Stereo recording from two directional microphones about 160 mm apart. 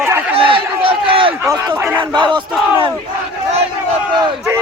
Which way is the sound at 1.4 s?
20° right (ahead or behind).